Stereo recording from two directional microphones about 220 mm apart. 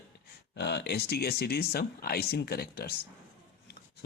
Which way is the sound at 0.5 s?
50° left (ahead or behind).